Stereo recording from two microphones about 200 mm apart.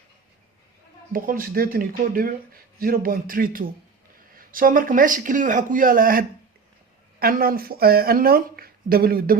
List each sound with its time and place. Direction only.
1.1 s speech: 45° right (ahead or behind)